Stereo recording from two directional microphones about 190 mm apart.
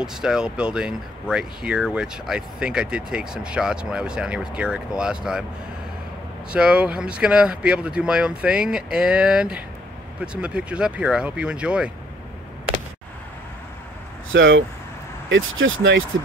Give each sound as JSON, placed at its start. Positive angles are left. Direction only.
{"t": 0.0, "sound": "speech", "side_deg": -5}
{"t": 6.5, "sound": "speech", "side_deg": -5}
{"t": 14.3, "sound": "speech", "side_deg": -75}